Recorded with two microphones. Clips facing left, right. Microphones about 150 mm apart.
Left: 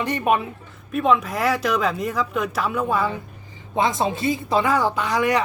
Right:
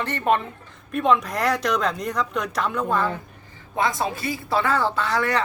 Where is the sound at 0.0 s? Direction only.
15° left (ahead or behind).